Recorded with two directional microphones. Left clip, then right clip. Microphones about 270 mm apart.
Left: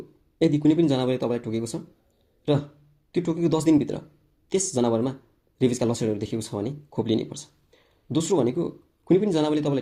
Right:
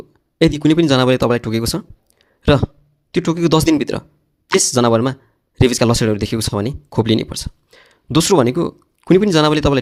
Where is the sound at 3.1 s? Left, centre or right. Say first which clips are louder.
Right 9 dB; right.